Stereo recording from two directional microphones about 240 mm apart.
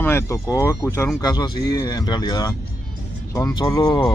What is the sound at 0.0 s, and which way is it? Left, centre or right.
Speech, centre.